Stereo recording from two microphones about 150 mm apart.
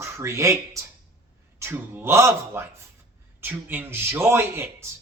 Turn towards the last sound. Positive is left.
turn(degrees=-15)  # may be behind; listen again after turning